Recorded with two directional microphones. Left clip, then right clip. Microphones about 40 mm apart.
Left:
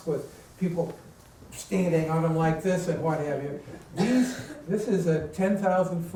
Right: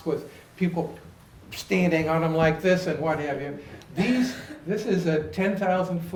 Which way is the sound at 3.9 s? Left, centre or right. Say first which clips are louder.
Even; centre.